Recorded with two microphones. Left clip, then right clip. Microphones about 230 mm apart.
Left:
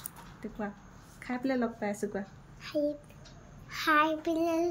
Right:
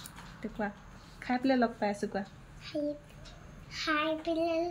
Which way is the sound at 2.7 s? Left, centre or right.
Centre.